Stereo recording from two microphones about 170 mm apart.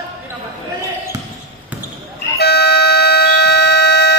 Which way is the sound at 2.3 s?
70° left (ahead or behind).